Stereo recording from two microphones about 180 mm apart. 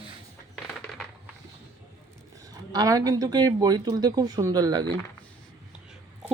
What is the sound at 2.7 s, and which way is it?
Speech, 20° right (ahead or behind).